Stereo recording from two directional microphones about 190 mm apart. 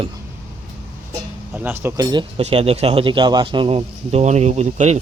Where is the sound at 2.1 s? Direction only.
30° right (ahead or behind).